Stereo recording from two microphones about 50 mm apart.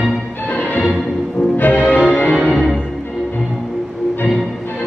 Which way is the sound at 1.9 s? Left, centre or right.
Left.